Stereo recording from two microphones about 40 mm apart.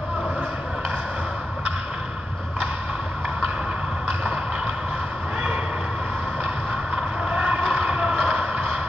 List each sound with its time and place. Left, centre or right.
7.0 s vehicle: right